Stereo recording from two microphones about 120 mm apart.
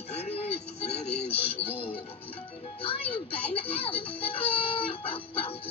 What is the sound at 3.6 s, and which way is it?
Chicken, 50° left (ahead or behind).